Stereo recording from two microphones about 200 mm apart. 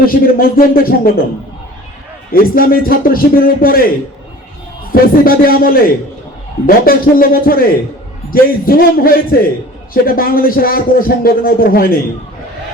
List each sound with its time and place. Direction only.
0.0 s a man's voice: 45° left (ahead or behind)
2.3 s a man's voice: 45° left (ahead or behind)